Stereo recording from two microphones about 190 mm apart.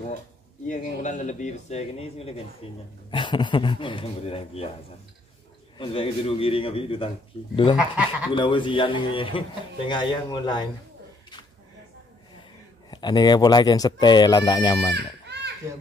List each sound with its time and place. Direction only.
0.7 s speech: 40° left (ahead or behind)
5.8 s speech: 30° left (ahead or behind)
7.7 s speech: 5° right (ahead or behind)
8.3 s speech: 25° left (ahead or behind)
12.9 s speech: 20° left (ahead or behind)
15.0 s children playing: 60° right (ahead or behind)